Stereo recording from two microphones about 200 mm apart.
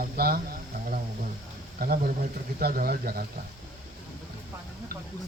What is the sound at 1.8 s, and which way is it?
Mantra, 50° right (ahead or behind).